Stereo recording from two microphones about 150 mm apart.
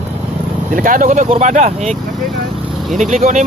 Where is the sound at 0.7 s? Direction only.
65° right (ahead or behind); by 2.0 s 50° right (ahead or behind).